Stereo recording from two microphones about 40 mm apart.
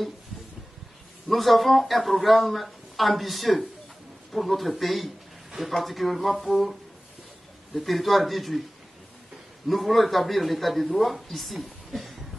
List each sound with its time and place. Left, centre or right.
1.3 s a man's voice: centre
9.7 s a man's voice: centre